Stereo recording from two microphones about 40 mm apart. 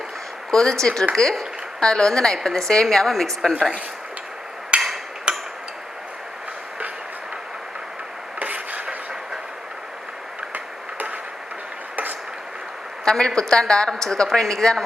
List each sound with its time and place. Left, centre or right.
0.5 s a woman's voice: centre
4.7 s hammer: right
5.3 s a sound: right
8.4 s a sound: right
10.5 s tick-tock: right
13.1 s a woman's voice: centre